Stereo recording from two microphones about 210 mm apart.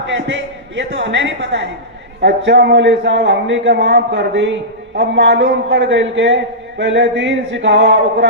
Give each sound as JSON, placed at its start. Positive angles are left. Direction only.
{"t": 0.1, "sound": "a woman's voice", "side_deg": -60}